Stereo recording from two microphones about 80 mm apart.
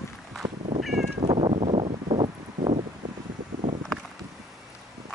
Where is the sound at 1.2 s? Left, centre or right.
Right.